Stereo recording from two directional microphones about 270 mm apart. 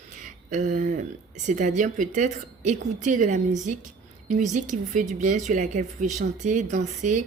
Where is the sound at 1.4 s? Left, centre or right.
Right.